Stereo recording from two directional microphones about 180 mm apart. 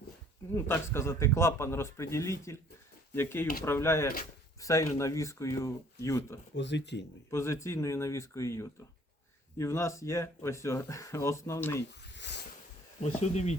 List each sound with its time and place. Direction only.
0.5 s speech: 15° left (ahead or behind)
6.6 s speech: 75° left (ahead or behind)
7.3 s speech: 15° left (ahead or behind)
12.1 s a sound: 75° left (ahead or behind)
13.0 s speech: 40° left (ahead or behind)